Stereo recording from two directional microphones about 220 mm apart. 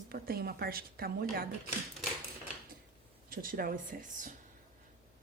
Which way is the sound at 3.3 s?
40° right (ahead or behind).